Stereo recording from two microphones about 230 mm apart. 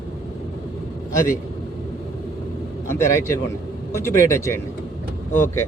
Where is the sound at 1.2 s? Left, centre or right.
Left.